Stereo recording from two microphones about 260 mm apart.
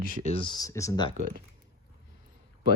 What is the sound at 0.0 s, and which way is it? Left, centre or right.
Speech, right.